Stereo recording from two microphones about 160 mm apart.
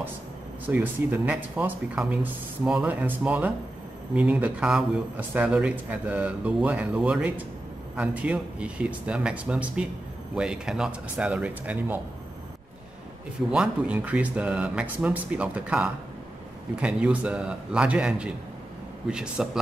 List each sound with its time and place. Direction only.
0.7 s a man's voice: 10° right (ahead or behind)
13.5 s a man's voice: 5° right (ahead or behind)